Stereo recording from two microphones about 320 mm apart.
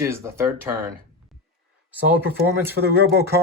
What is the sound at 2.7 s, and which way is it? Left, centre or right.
Speech, right.